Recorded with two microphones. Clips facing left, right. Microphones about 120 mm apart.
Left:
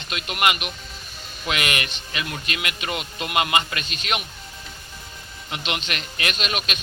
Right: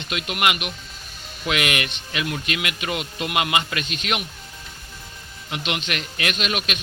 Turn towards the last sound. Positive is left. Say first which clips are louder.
# right 2 dB
turn(degrees=-5)  # may be behind; listen again after turning